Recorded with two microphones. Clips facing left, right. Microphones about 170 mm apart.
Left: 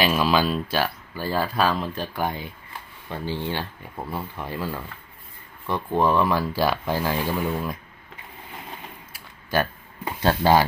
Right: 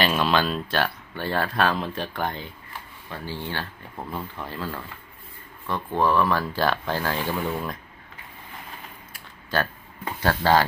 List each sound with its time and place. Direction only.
0.0 s speech: 5° left (ahead or behind)
10.2 s speech: 15° left (ahead or behind)